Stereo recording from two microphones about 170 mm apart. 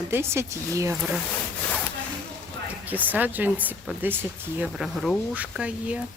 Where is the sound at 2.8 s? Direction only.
10° right (ahead or behind).